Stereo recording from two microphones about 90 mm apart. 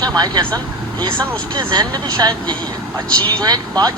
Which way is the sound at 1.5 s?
50° right (ahead or behind).